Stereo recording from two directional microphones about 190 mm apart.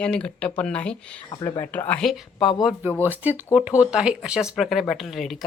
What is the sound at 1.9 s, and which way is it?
Speech, centre (ahead or behind).